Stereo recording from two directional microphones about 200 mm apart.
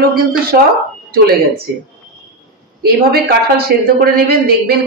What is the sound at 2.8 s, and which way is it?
A man's voice, 50° right (ahead or behind).